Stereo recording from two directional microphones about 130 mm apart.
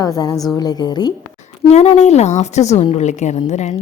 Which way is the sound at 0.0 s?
25° left (ahead or behind).